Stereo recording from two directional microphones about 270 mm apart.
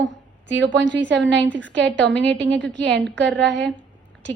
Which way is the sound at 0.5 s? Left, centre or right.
Right.